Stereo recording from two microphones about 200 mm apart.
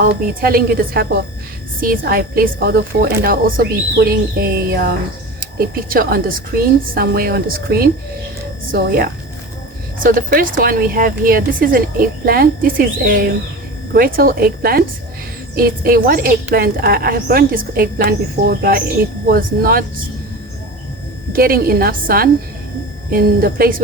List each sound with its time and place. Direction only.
0.0 s a woman's voice: 45° right (ahead or behind)
21.3 s a woman's voice: 45° right (ahead or behind)